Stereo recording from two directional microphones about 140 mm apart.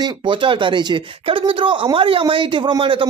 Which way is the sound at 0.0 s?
35° right (ahead or behind).